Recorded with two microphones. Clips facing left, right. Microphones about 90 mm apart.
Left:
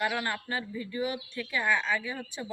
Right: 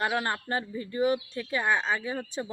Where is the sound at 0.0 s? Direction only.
35° right (ahead or behind).